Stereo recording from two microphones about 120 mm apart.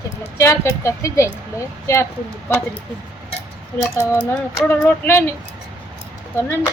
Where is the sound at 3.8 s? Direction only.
20° left (ahead or behind).